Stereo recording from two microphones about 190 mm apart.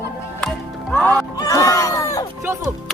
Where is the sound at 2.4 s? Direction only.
15° right (ahead or behind).